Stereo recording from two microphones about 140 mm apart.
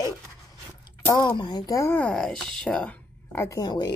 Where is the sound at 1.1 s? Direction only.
35° left (ahead or behind).